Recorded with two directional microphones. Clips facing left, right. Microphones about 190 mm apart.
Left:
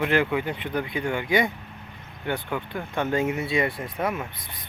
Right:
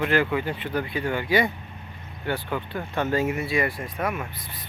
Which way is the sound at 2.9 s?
15° left (ahead or behind).